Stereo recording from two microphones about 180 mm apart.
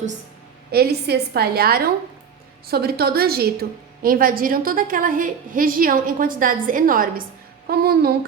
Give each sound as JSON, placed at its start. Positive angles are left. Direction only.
{"t": 0.7, "sound": "a woman's voice", "side_deg": -60}